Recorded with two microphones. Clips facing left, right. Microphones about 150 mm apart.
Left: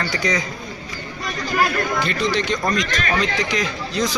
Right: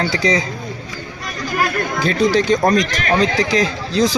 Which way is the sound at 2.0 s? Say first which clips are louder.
Right 6 dB; 40° right (ahead or behind).